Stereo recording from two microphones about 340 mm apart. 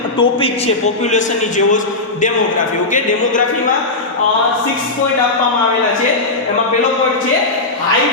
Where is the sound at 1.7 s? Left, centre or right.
Left.